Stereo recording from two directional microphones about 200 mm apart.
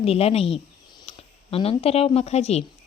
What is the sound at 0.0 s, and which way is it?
Speech, 30° left (ahead or behind).